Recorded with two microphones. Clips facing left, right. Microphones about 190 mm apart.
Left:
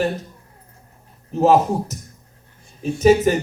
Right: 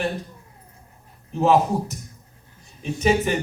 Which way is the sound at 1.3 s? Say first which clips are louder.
Left 3 dB; 40° left (ahead or behind).